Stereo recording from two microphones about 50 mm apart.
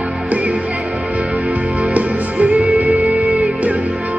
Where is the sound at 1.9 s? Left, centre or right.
Right.